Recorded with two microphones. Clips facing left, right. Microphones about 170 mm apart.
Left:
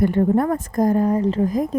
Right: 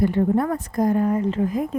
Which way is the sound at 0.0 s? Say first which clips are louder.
Left 2 dB; 50° left (ahead or behind).